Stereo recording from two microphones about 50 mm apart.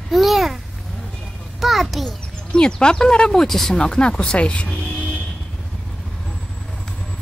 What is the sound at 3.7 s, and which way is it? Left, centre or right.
Speech, centre.